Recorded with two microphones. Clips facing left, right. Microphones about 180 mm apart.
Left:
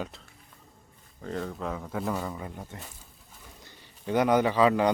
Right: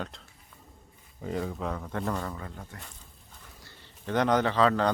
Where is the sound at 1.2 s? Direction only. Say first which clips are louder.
Right 1 dB; 5° right (ahead or behind).